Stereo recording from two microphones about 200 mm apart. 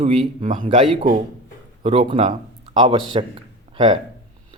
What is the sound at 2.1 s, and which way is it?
Speech, 25° right (ahead or behind).